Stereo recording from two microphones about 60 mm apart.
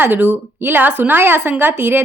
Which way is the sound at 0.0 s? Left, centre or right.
Right.